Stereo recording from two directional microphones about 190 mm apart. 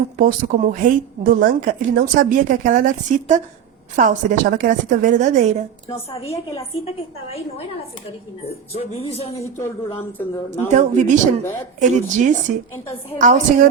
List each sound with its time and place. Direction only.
0.2 s a woman's voice: 45° right (ahead or behind)
5.9 s a man's voice: 15° left (ahead or behind)
6.2 s speech: 30° left (ahead or behind)
9.4 s a man's voice: 15° left (ahead or behind)
10.7 s speech: 40° right (ahead or behind)